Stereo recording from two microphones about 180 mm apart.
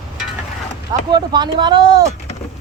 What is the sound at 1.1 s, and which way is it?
Speech, 25° right (ahead or behind).